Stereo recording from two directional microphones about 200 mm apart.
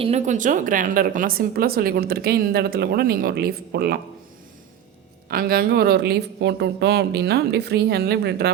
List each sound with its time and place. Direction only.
0.0 s a woman's voice: 35° right (ahead or behind); by 4.0 s 55° right (ahead or behind)
5.3 s a woman's voice: 50° right (ahead or behind)